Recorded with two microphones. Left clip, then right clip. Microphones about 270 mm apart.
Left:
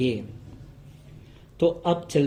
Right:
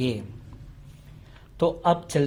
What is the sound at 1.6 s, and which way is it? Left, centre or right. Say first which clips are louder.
Speech: right 1 dB; right.